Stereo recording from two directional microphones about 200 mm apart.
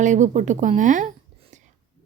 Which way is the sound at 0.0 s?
40° right (ahead or behind).